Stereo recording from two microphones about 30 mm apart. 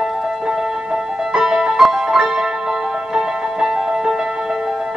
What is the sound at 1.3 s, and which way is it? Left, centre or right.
Music, centre.